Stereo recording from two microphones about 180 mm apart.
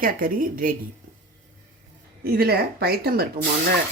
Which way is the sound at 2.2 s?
60° right (ahead or behind).